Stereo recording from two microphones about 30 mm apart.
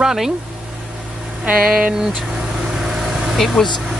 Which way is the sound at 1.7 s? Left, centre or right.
Right.